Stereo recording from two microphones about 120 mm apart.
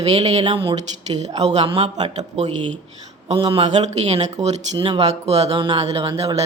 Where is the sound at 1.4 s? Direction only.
65° right (ahead or behind).